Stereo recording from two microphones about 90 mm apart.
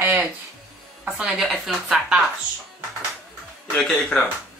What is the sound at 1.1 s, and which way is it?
A woman's voice, 5° right (ahead or behind).